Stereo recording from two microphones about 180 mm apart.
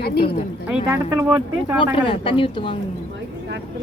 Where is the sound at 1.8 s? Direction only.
30° left (ahead or behind).